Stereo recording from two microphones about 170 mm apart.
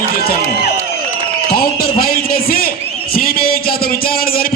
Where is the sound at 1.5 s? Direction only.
60° left (ahead or behind).